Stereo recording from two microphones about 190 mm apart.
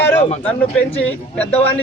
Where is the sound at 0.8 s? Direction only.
10° left (ahead or behind).